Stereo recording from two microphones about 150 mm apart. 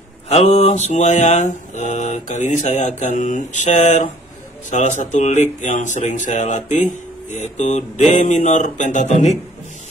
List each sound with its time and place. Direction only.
0.3 s speech: 45° left (ahead or behind)